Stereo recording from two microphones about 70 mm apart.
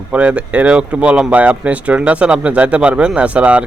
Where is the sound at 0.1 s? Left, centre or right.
Centre.